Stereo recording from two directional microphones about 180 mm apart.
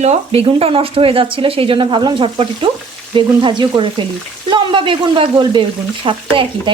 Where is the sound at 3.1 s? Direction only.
25° right (ahead or behind).